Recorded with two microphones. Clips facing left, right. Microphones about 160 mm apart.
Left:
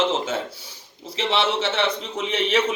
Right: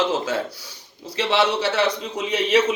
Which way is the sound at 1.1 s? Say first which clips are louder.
Right 2 dB; 65° right (ahead or behind).